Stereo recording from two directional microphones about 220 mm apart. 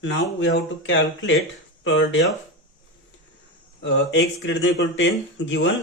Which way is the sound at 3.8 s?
55° left (ahead or behind).